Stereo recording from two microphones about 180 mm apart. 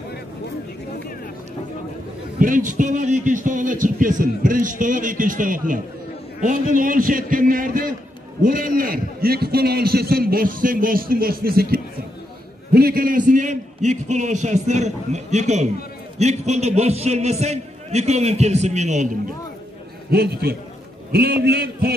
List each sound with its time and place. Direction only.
2.3 s a man's voice: 50° right (ahead or behind)
20.1 s a man's voice: 60° right (ahead or behind)